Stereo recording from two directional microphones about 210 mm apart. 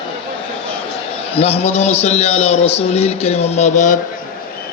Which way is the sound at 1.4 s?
30° left (ahead or behind).